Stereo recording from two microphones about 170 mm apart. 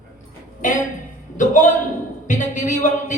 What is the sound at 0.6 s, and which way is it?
Speech, 50° left (ahead or behind).